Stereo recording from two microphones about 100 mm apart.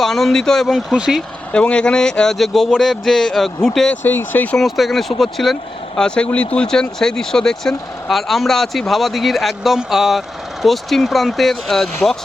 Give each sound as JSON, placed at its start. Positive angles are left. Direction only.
{"t": 0.0, "sound": "speech", "side_deg": 5}
{"t": 0.9, "sound": "speech", "side_deg": -10}
{"t": 1.5, "sound": "speech", "side_deg": 10}
{"t": 4.0, "sound": "speech", "side_deg": 20}
{"t": 4.5, "sound": "speech", "side_deg": 0}